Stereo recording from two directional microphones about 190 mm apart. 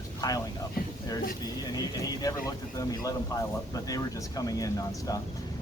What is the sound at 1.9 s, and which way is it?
Speech, 20° left (ahead or behind).